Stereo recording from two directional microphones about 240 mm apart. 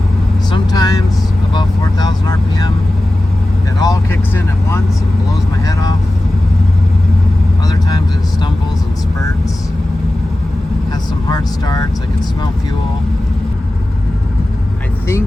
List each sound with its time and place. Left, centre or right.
0.5 s vehicle: centre
1.5 s speech: centre
3.8 s speech: centre
7.7 s speech: centre
11.3 s speech: centre